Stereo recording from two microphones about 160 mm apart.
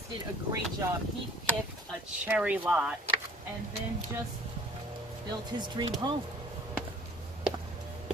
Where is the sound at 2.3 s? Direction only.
5° right (ahead or behind).